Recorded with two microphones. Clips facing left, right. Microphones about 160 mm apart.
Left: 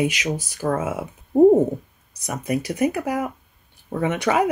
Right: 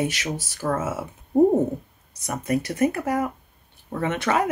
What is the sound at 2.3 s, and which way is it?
Speech, 15° left (ahead or behind).